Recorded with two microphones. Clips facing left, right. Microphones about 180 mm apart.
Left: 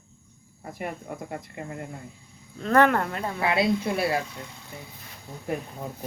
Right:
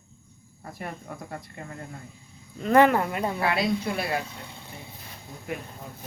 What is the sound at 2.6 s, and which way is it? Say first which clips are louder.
Speech: right 1 dB; 10° right (ahead or behind).